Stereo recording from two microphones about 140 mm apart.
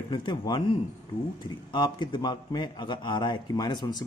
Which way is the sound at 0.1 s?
35° left (ahead or behind).